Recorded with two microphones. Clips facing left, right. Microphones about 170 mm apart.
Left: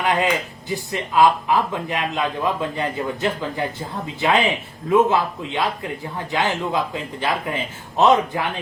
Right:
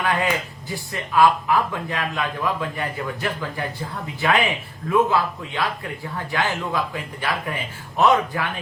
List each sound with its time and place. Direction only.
0.0 s speech: 20° left (ahead or behind)